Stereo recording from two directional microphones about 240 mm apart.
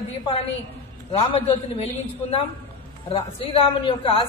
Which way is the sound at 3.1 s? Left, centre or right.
Left.